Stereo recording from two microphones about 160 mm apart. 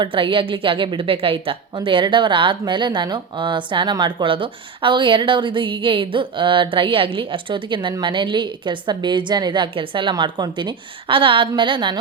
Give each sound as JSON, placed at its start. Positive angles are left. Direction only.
{"t": 0.0, "sound": "a woman's voice", "side_deg": -30}